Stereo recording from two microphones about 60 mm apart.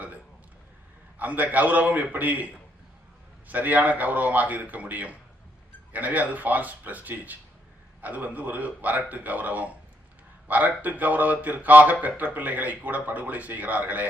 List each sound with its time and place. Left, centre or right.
1.2 s speech: right